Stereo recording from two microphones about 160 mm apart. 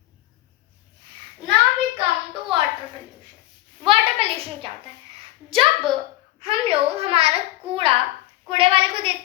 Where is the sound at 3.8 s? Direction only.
35° right (ahead or behind).